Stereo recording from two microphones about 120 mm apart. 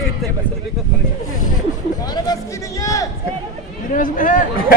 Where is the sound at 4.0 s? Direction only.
90° left.